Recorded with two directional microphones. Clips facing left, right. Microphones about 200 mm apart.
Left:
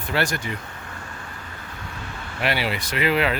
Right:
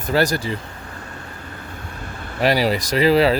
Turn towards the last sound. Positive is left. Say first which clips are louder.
# right 7 dB
turn(degrees=-35)  # may be behind; listen again after turning